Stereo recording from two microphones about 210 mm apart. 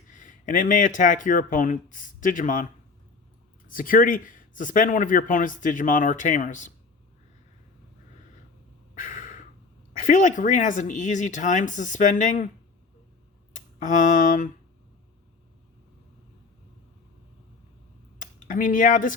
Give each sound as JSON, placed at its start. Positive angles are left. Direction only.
{"t": 0.1, "sound": "speech", "side_deg": 35}
{"t": 3.7, "sound": "speech", "side_deg": 40}
{"t": 9.0, "sound": "a sound", "side_deg": 40}
{"t": 10.0, "sound": "speech", "side_deg": 40}
{"t": 13.5, "sound": "a sound", "side_deg": 35}
{"t": 18.2, "sound": "speech", "side_deg": 40}